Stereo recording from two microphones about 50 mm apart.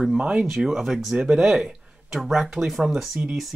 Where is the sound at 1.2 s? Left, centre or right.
Centre.